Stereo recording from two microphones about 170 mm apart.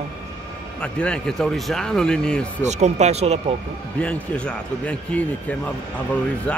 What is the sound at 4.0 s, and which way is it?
A man's voice, 5° left (ahead or behind).